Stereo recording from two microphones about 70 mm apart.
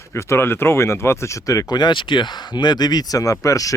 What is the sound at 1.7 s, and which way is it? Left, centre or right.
Speech, left.